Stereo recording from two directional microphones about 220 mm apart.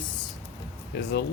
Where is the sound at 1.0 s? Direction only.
50° left (ahead or behind).